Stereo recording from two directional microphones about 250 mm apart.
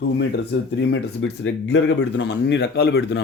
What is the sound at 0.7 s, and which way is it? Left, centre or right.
Speech, left.